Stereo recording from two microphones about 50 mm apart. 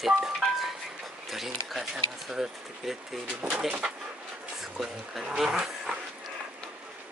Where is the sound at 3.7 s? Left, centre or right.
Centre.